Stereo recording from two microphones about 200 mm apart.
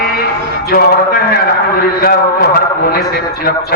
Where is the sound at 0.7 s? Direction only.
50° left (ahead or behind).